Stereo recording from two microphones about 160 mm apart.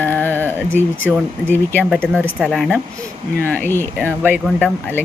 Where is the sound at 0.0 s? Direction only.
10° left (ahead or behind).